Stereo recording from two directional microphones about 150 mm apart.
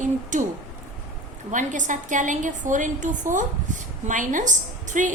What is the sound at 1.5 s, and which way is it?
A woman's voice, 55° right (ahead or behind).